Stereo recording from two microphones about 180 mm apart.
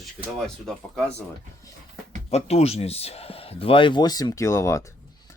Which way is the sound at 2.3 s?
35° left (ahead or behind).